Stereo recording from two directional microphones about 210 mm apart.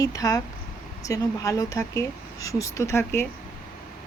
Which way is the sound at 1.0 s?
15° left (ahead or behind).